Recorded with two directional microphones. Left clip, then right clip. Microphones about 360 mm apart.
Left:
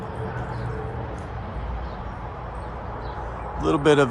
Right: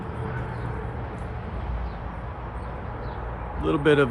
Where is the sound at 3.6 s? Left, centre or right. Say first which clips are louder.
Left 2 dB; centre.